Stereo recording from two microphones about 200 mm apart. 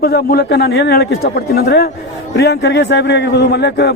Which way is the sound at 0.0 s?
50° left (ahead or behind).